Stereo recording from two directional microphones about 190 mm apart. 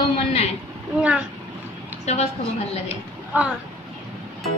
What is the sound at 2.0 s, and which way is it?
Speech, 35° left (ahead or behind).